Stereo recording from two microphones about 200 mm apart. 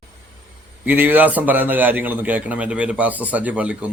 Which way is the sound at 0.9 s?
10° right (ahead or behind).